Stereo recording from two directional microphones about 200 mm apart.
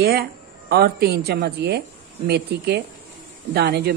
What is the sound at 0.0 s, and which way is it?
Speech, 50° right (ahead or behind).